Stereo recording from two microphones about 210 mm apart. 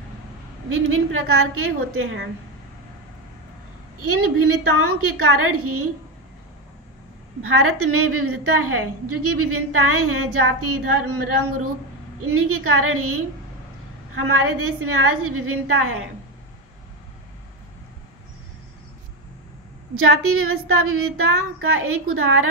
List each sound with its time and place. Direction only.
0.7 s a woman's voice: 70° right (ahead or behind)
4.0 s a woman's voice: 90° right
7.4 s a woman's voice: 85° right
20.0 s a woman's voice: 85° right